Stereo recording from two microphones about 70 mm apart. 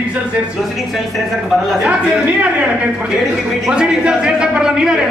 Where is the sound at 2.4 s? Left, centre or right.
Centre.